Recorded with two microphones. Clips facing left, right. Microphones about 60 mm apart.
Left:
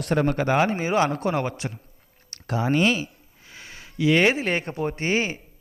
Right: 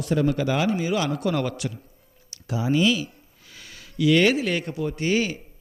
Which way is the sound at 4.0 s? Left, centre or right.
Left.